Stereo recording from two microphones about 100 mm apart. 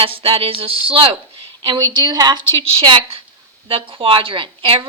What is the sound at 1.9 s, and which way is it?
Speech, 40° right (ahead or behind).